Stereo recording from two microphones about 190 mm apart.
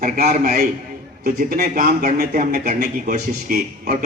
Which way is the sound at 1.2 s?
55° right (ahead or behind).